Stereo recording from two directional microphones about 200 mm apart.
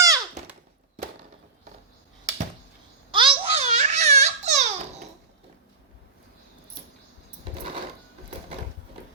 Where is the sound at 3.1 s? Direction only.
25° right (ahead or behind).